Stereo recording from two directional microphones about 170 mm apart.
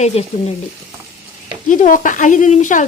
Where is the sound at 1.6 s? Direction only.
50° left (ahead or behind).